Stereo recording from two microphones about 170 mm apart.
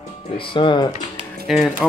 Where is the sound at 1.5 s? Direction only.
Centre (ahead or behind).